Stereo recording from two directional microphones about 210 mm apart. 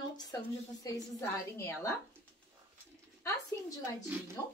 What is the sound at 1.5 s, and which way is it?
Speech, 10° left (ahead or behind).